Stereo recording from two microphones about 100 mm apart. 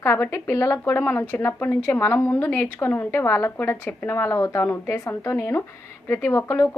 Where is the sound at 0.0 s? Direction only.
25° left (ahead or behind).